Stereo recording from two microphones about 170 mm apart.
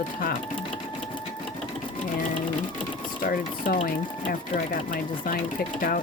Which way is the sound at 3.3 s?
55° left (ahead or behind).